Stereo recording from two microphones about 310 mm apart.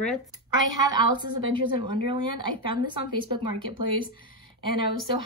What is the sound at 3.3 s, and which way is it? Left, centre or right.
Speech, centre.